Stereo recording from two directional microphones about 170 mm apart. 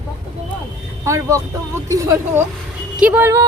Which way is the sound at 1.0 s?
15° right (ahead or behind).